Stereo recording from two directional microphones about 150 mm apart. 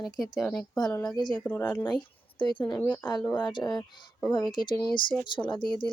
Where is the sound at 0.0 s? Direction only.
Centre (ahead or behind).